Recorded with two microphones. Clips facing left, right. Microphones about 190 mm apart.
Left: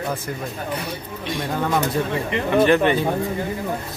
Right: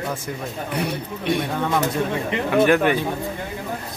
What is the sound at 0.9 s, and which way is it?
Speech, 60° right (ahead or behind).